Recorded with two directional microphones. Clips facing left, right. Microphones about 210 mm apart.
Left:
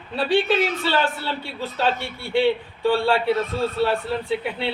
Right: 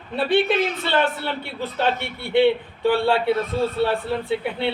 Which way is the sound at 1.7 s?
20° right (ahead or behind).